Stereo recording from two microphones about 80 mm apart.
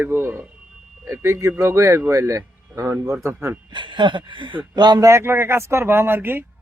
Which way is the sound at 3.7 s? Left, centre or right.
Right.